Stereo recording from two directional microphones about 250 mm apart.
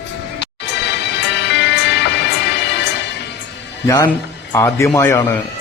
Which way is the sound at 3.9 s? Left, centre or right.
Centre.